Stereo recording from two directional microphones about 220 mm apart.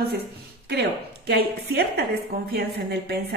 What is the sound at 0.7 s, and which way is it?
A woman's voice, 45° right (ahead or behind).